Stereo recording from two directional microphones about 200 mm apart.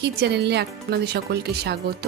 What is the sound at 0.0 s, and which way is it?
Speech, 55° right (ahead or behind).